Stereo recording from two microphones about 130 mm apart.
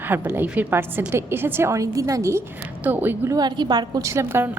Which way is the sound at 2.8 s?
15° right (ahead or behind).